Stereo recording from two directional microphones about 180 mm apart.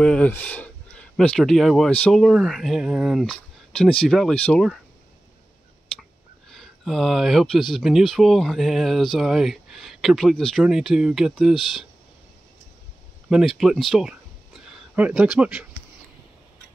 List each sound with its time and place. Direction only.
0.0 s speech: 5° left (ahead or behind)
6.5 s speech: centre (ahead or behind)
13.3 s speech: centre (ahead or behind)